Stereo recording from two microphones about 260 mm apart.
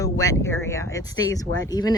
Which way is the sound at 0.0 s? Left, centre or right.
Centre.